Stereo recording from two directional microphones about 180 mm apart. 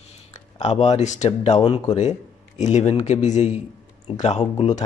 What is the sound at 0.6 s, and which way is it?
Speech, 35° left (ahead or behind).